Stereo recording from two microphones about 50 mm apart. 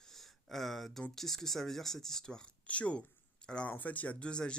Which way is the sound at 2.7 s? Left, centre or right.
Left.